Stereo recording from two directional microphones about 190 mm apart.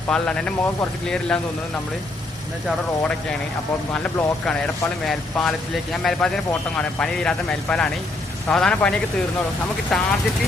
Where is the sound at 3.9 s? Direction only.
5° left (ahead or behind).